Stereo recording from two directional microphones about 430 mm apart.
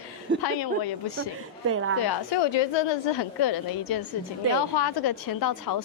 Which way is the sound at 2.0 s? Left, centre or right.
Left.